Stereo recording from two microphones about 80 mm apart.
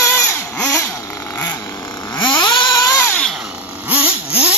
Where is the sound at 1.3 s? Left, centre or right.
Left.